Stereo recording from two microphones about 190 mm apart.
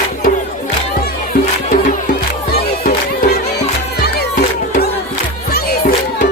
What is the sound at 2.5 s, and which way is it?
Music, 50° left (ahead or behind).